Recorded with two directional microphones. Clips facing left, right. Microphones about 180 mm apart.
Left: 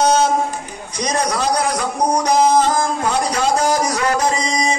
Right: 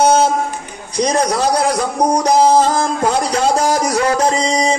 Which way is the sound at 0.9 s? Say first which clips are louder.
Right 5 dB; 30° right (ahead or behind).